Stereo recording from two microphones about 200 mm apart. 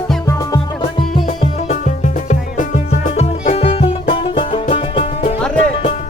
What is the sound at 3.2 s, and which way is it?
Music, 30° left (ahead or behind).